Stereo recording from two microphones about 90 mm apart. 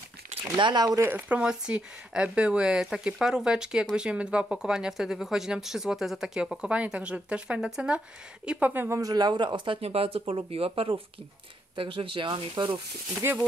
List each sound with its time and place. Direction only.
0.6 s speech: 60° right (ahead or behind)
1.0 s speech: 15° right (ahead or behind)
8.9 s speech: 45° right (ahead or behind); by 12.8 s 65° right (ahead or behind)
13.2 s speech: 30° right (ahead or behind)